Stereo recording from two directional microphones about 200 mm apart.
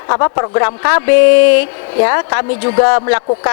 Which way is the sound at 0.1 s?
25° left (ahead or behind).